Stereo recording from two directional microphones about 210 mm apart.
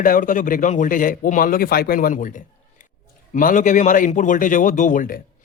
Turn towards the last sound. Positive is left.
turn(degrees=40)  # may be behind; listen again after turning